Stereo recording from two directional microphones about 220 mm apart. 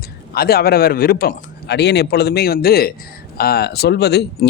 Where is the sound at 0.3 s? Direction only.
45° left (ahead or behind).